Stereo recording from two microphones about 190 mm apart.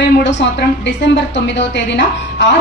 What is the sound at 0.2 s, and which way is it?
A woman's voice, 70° left (ahead or behind).